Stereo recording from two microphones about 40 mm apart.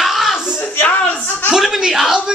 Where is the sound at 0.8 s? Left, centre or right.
Left.